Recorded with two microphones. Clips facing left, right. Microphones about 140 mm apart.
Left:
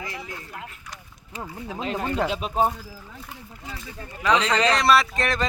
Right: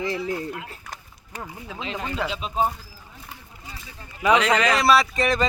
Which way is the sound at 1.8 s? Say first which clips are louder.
Left 3 dB; 50° left (ahead or behind).